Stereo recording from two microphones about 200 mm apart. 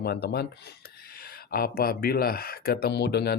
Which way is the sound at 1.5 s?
45° left (ahead or behind).